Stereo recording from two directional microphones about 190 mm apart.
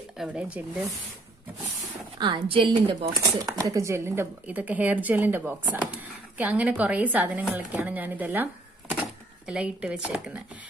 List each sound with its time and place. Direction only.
0.2 s speech: 5° right (ahead or behind)
2.1 s a woman's voice: 25° right (ahead or behind); by 8.5 s 10° right (ahead or behind)
9.5 s speech: 5° right (ahead or behind)